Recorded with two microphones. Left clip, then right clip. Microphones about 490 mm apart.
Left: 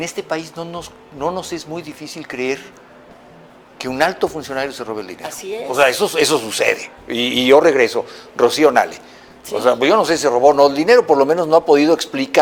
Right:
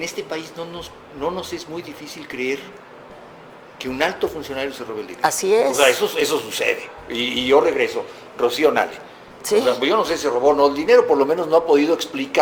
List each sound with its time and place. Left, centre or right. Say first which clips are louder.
0.0 s speech: left 4 dB; left
3.8 s speech: left 4 dB; left
5.2 s speech: right 10 dB; right
5.7 s speech: left 2 dB; left